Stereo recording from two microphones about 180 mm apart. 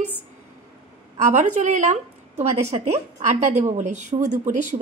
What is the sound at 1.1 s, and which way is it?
A woman's voice, 45° right (ahead or behind).